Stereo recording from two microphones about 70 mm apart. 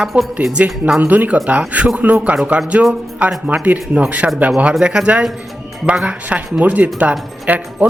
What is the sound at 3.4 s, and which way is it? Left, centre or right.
A woman's voice, right.